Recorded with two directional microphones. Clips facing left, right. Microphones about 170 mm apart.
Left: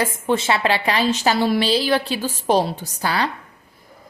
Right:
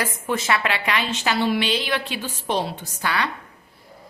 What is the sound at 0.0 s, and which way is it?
Speech, 30° left (ahead or behind).